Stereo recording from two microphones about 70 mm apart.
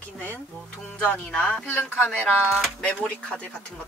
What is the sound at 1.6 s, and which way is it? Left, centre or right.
Speech, left.